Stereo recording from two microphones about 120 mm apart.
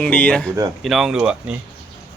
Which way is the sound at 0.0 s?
10° left (ahead or behind).